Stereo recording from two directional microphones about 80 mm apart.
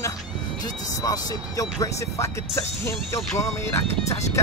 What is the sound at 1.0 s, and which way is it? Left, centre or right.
Speech, left.